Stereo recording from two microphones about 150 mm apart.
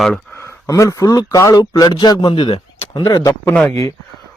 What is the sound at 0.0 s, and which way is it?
Speech, 5° left (ahead or behind).